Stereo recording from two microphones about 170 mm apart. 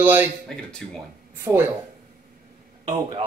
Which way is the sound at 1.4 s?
15° right (ahead or behind).